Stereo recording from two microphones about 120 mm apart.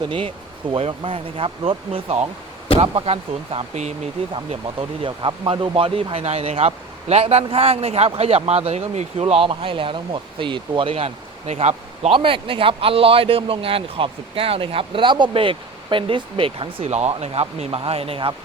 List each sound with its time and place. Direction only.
0.0 s speech: 45° right (ahead or behind); by 3.9 s 60° right (ahead or behind)
4.8 s speech: 45° right (ahead or behind)
10.9 s speech: 55° right (ahead or behind)
12.1 s speech: 45° right (ahead or behind)
16.9 s speech: 65° right (ahead or behind); by 18.3 s 50° right (ahead or behind)